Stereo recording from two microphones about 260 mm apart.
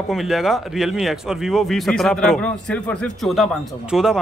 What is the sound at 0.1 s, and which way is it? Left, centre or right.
Speech, centre.